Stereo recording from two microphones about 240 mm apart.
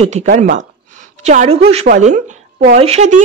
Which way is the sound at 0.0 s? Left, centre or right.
Right.